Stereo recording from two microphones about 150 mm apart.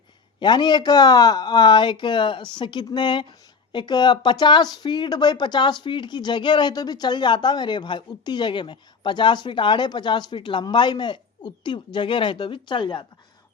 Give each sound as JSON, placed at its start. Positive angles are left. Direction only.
{"t": 0.3, "sound": "speech", "side_deg": 30}